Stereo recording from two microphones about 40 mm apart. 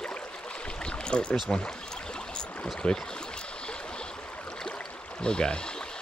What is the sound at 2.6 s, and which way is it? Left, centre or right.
Speech, left.